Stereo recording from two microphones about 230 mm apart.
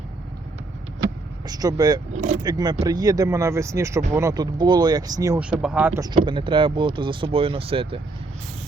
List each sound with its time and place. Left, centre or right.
1.5 s speech: centre
2.1 s speech: right
2.4 s speech: centre